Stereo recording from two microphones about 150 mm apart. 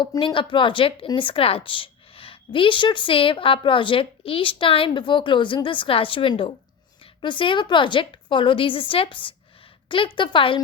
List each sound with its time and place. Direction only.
0.0 s speech: 30° left (ahead or behind)